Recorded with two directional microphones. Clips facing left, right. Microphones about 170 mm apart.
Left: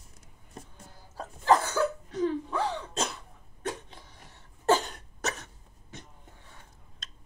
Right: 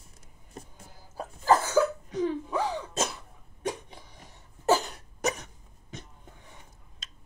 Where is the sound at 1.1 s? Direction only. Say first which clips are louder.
Even; 5° right (ahead or behind).